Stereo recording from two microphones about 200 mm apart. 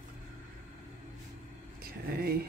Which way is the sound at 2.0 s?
50° right (ahead or behind).